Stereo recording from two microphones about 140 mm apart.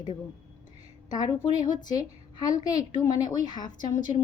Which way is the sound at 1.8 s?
30° left (ahead or behind).